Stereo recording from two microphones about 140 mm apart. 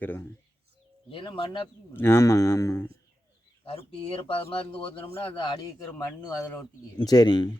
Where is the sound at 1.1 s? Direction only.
35° left (ahead or behind).